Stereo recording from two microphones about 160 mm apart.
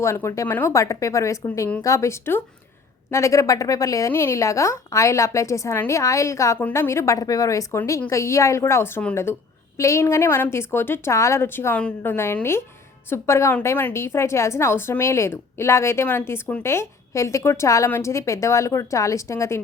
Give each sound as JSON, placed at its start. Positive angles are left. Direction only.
{"t": 0.0, "sound": "a woman's voice", "side_deg": 20}